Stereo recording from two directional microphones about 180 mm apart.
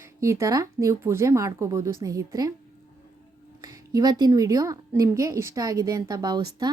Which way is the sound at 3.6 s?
20° right (ahead or behind).